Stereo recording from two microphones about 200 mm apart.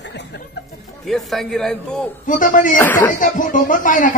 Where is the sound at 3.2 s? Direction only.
40° left (ahead or behind).